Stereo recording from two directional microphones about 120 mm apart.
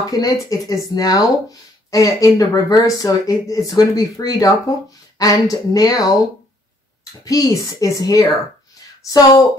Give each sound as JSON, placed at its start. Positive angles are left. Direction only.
{"t": 0.1, "sound": "speech", "side_deg": 30}
{"t": 7.2, "sound": "speech", "side_deg": 30}